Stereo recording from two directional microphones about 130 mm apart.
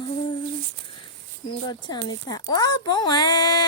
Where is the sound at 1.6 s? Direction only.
35° left (ahead or behind).